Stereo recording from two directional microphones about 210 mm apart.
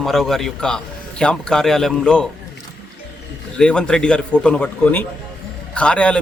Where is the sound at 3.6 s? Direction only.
5° left (ahead or behind).